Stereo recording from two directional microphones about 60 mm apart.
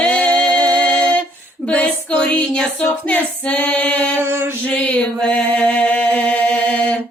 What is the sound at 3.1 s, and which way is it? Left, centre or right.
Female singing, left.